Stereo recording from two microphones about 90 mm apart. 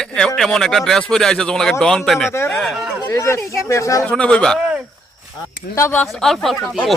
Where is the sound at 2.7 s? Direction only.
10° right (ahead or behind).